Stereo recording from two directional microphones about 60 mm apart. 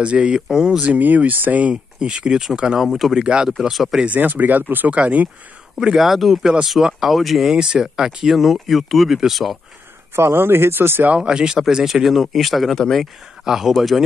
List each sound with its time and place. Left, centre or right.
0.0 s speech: centre
0.8 s speech: right
2.8 s speech: centre
4.0 s speech: right
5.8 s speech: centre
7.5 s speech: centre
10.1 s speech: right
11.1 s speech: centre